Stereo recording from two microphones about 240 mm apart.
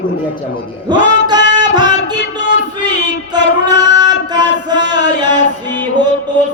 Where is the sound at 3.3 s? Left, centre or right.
Centre.